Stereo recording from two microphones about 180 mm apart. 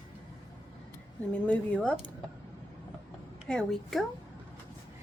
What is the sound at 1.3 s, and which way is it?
Speech, 10° left (ahead or behind).